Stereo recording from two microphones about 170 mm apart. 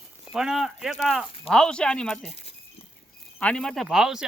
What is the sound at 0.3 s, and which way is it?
Speech, centre (ahead or behind).